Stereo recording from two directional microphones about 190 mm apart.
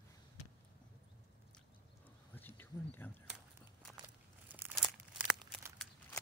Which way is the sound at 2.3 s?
10° left (ahead or behind).